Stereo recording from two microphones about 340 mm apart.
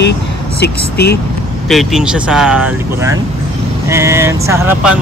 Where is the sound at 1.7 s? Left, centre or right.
Centre.